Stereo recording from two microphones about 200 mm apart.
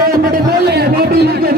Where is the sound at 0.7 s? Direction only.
55° right (ahead or behind).